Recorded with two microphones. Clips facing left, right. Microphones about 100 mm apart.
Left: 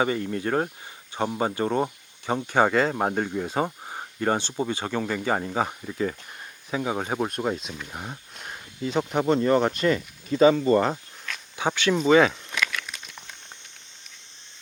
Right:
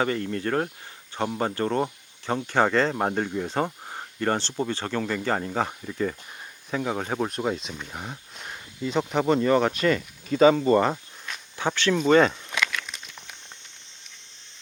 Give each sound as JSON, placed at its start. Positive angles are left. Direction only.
{"t": 0.0, "sound": "speech", "side_deg": 15}
{"t": 10.8, "sound": "a sound", "side_deg": -5}
{"t": 11.5, "sound": "speech", "side_deg": 15}